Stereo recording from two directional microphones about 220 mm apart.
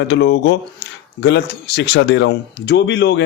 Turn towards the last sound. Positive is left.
turn(degrees=50)  # may be behind; listen again after turning